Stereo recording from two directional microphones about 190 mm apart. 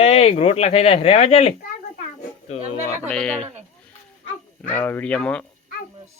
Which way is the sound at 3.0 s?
5° left (ahead or behind).